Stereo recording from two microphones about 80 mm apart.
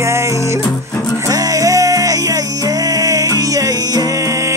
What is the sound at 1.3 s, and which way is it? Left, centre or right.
Music, right.